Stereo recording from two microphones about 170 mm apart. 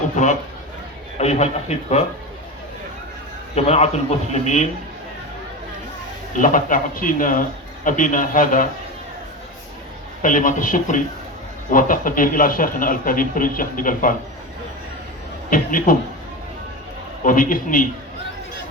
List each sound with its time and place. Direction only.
0.2 s a man's voice: 45° left (ahead or behind)
3.5 s a man's voice: 40° left (ahead or behind)
6.3 s a man's voice: 50° left (ahead or behind)
10.2 s a man's voice: 50° left (ahead or behind)
15.4 s a man's voice: 55° left (ahead or behind)
17.2 s a man's voice: 50° left (ahead or behind)